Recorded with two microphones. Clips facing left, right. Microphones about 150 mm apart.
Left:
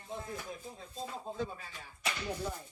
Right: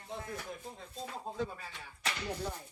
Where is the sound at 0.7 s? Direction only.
25° left (ahead or behind).